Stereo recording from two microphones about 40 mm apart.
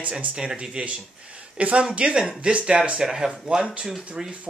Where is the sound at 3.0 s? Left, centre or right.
Centre.